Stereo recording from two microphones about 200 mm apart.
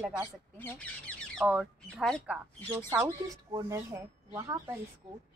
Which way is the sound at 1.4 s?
5° right (ahead or behind).